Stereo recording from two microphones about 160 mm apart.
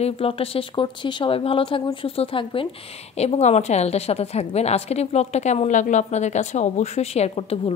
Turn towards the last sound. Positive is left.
turn(degrees=40)  # may be behind; listen again after turning